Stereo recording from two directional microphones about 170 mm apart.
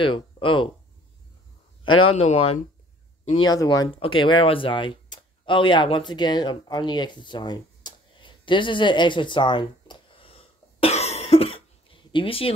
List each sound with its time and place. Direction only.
0.0 s speech: 30° left (ahead or behind)
1.9 s a man's voice: 30° left (ahead or behind)
3.4 s speech: 20° left (ahead or behind)
4.0 s a sound: 30° left (ahead or behind)